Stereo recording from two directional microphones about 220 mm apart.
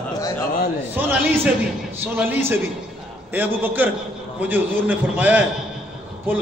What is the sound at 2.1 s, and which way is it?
A man's voice, 10° right (ahead or behind).